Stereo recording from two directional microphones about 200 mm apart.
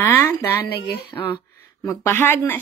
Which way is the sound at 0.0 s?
10° left (ahead or behind).